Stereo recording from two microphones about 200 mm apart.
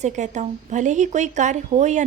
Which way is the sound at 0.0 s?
35° right (ahead or behind).